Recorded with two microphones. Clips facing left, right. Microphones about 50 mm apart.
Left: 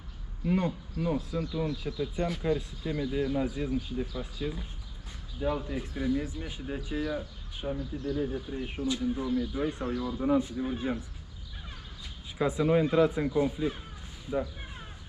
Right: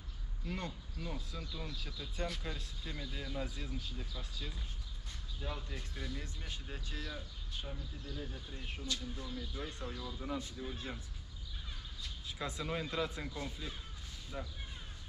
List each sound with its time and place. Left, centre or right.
0.5 s speech: left
7.6 s speech: left
8.2 s speech: left
10.2 s speech: left
12.0 s speech: centre
14.3 s a sound: left